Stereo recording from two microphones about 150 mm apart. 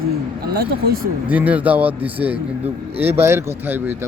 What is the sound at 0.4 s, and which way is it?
Speech, 90° right.